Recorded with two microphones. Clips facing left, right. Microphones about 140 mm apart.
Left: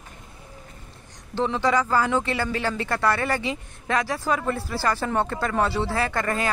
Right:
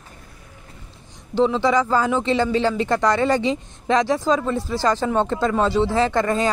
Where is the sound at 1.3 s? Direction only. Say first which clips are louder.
Right 5 dB; 15° right (ahead or behind).